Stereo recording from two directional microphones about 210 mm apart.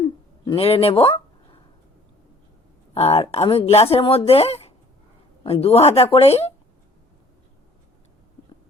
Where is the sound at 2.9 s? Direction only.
30° left (ahead or behind).